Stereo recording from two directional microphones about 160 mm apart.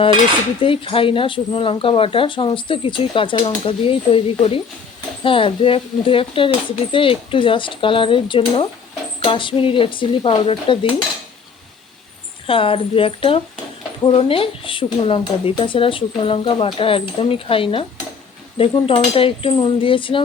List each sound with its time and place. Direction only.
0.6 s speech: 35° left (ahead or behind)
12.5 s speech: 35° left (ahead or behind)